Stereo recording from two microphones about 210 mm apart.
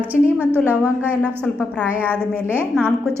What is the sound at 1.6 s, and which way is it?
Speech, 5° left (ahead or behind).